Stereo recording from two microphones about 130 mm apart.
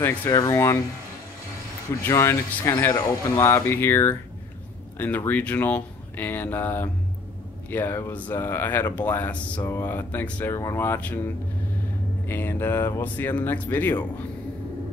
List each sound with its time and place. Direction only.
0.3 s speech: 25° left (ahead or behind)
2.0 s speech: 20° left (ahead or behind)